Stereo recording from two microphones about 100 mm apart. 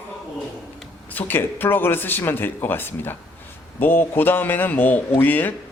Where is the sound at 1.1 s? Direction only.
20° left (ahead or behind).